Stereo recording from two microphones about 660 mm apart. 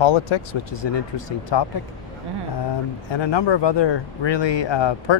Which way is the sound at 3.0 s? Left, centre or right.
Left.